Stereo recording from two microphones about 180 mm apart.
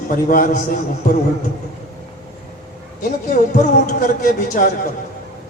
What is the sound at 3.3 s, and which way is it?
A man's voice, 40° left (ahead or behind).